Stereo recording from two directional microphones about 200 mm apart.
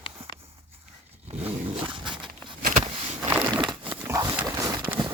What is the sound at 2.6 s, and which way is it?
Vehicle, 40° right (ahead or behind).